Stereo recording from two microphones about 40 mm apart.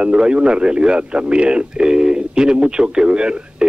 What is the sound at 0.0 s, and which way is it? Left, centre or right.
A man's voice, right.